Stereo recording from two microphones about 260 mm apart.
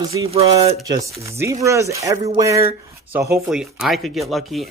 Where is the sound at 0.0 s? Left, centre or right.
Centre.